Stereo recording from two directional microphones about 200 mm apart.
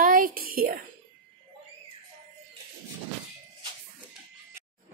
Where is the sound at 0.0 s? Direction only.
45° right (ahead or behind).